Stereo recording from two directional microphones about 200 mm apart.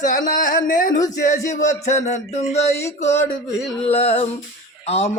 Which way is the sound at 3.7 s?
30° left (ahead or behind).